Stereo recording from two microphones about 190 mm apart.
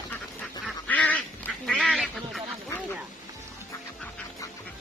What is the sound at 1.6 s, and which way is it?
Duck, centre (ahead or behind).